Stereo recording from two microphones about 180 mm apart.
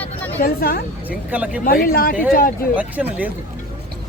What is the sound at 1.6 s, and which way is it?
Speech, 55° left (ahead or behind).